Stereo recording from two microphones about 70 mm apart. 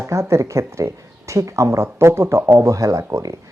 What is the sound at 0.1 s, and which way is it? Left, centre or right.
Speech, right.